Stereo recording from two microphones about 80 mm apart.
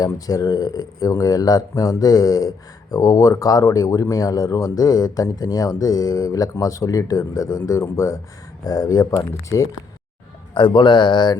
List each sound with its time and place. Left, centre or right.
0.0 s speech: left
10.5 s speech: left